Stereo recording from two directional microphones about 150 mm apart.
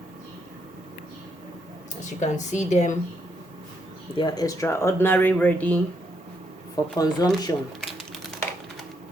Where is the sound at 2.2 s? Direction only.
50° left (ahead or behind).